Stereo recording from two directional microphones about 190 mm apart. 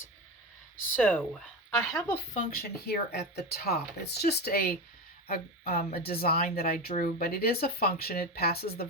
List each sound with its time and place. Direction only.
0.9 s speech: 10° left (ahead or behind)
2.3 s a woman's voice: 50° left (ahead or behind)